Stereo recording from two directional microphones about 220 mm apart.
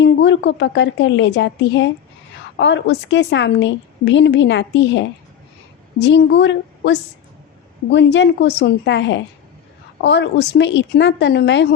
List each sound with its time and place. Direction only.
0.0 s a woman's voice: 55° left (ahead or behind)